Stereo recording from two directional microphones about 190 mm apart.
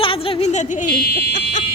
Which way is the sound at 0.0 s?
30° left (ahead or behind).